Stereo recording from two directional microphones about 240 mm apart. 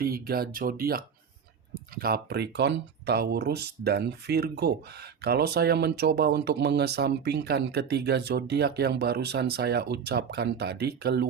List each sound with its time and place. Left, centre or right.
0.0 s speech: right